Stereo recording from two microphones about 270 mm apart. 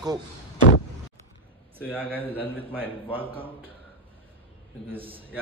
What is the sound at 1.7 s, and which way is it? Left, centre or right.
Speech, centre.